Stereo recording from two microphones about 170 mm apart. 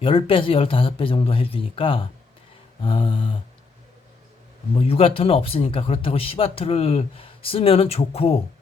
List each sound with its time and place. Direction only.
0.0 s speech: 30° left (ahead or behind)
4.8 s speech: 35° left (ahead or behind)